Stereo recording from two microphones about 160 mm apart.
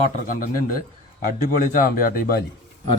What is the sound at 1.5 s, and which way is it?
Speech, 60° left (ahead or behind).